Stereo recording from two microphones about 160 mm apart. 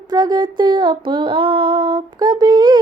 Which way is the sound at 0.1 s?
25° right (ahead or behind).